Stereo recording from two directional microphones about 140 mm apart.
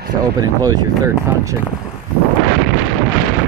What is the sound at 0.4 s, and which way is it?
Speech, 25° right (ahead or behind).